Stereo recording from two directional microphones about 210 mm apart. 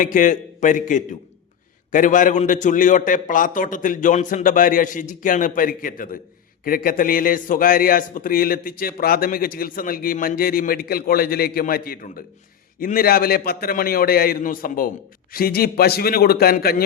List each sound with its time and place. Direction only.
0.0 s a man's voice: 40° left (ahead or behind)